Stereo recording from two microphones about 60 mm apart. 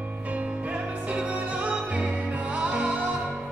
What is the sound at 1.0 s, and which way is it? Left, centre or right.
Music, right.